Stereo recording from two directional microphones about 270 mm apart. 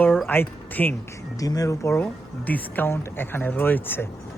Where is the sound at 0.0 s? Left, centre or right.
Centre.